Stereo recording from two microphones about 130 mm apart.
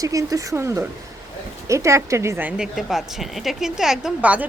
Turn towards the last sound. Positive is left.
turn(degrees=-10)  # may be behind; listen again after turning